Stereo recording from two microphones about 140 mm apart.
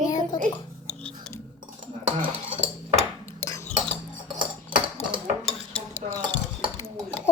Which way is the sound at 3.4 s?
20° left (ahead or behind).